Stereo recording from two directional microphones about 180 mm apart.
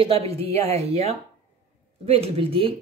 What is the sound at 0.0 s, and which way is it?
Speech, 30° right (ahead or behind).